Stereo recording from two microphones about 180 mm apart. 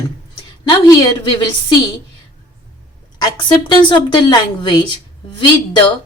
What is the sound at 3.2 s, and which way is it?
Speech, 25° left (ahead or behind).